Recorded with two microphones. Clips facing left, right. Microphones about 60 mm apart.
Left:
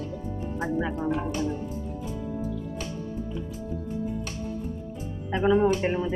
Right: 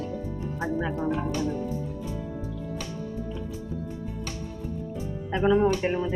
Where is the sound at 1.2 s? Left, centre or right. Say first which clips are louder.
Right 1 dB; left.